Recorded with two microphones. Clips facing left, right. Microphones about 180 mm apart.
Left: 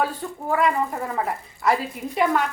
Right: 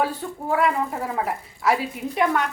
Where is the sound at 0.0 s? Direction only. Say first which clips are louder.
Right 1 dB; centre (ahead or behind).